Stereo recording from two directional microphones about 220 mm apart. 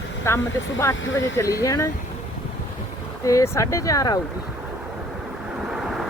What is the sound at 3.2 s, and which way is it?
Speech, 15° left (ahead or behind).